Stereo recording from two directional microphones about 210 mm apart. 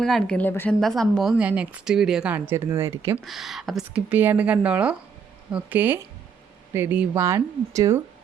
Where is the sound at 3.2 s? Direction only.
Centre (ahead or behind).